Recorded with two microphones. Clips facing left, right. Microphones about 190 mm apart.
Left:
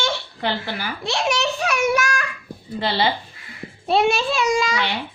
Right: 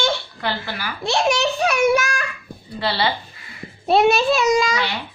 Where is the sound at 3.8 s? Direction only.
40° right (ahead or behind).